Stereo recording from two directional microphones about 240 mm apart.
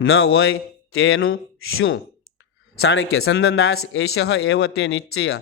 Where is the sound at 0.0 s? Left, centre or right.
Left.